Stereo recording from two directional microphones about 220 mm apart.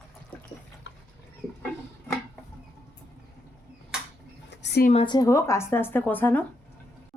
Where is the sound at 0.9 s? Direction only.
55° left (ahead or behind).